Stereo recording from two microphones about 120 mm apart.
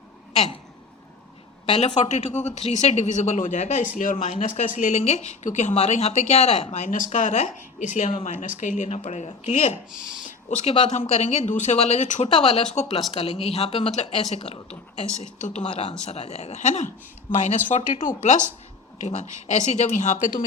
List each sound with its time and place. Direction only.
2.0 s speech: 80° left
6.7 s speech: 85° left
11.0 s speech: 60° left (ahead or behind)
13.1 s speech: 55° left (ahead or behind)
13.9 s speech: 70° left (ahead or behind)
15.6 s speech: 65° left (ahead or behind); by 18.4 s 85° left
18.9 s speech: 75° left (ahead or behind)